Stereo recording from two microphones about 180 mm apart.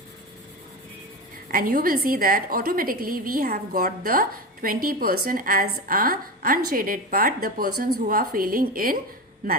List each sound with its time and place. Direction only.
1.5 s a woman's voice: 50° right (ahead or behind)